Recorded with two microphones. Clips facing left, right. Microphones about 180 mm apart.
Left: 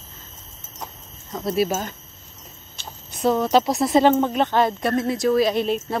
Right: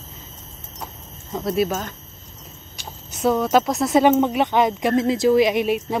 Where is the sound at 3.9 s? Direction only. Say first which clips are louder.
Right 1 dB; 15° right (ahead or behind).